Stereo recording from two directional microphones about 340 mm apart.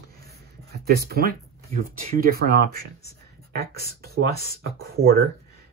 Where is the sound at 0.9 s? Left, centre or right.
Right.